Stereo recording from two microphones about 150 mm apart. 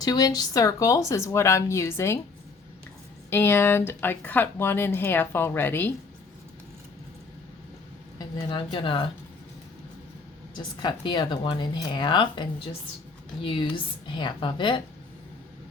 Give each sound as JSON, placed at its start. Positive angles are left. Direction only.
{"t": 0.0, "sound": "speech", "side_deg": 25}
{"t": 3.2, "sound": "speech", "side_deg": 15}
{"t": 8.2, "sound": "speech", "side_deg": 25}
{"t": 10.8, "sound": "speech", "side_deg": 30}